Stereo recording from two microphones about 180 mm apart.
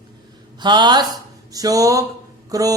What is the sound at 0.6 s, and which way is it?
Mantra, 25° right (ahead or behind).